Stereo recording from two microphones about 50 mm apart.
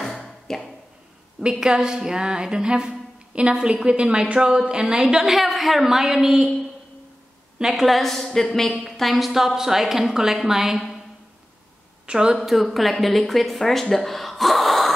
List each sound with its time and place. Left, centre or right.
0.0 s a sound: centre
1.4 s a woman's voice: centre
7.7 s a woman's voice: centre
12.1 s a woman's voice: centre
12.4 s a woman's voice: centre